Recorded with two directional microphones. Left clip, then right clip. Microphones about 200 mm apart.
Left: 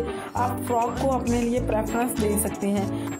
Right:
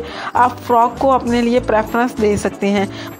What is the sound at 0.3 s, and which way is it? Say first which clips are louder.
Speech: right 13 dB; 15° right (ahead or behind).